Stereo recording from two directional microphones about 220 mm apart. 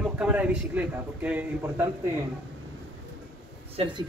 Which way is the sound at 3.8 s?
20° right (ahead or behind).